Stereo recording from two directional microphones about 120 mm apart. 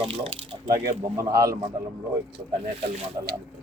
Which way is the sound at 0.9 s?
30° right (ahead or behind).